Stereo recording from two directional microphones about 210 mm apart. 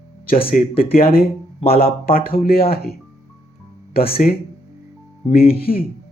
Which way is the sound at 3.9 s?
45° left (ahead or behind).